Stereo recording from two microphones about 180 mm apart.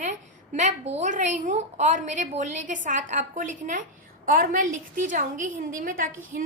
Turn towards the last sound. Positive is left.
turn(degrees=-50)  # may be behind; listen again after turning